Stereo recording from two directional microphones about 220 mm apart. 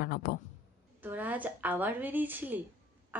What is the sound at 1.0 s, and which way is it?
Speech, 5° right (ahead or behind).